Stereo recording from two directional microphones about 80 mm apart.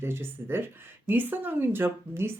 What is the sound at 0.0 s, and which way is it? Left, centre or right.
Speech, right.